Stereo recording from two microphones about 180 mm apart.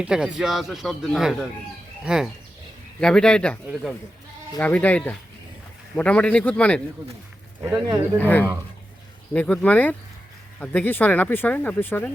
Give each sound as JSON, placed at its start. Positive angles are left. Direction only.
{"t": 0.0, "sound": "speech", "side_deg": -5}
{"t": 7.6, "sound": "speech", "side_deg": -20}
{"t": 8.2, "sound": "speech", "side_deg": 10}